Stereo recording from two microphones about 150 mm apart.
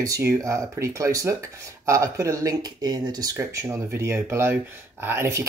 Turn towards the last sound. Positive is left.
turn(degrees=-15)  # may be behind; listen again after turning